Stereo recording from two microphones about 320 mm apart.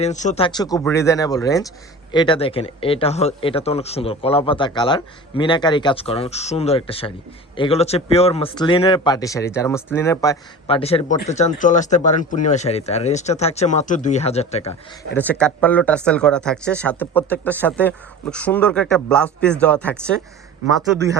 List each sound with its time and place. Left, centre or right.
0.0 s speech: left
15.1 s speech: centre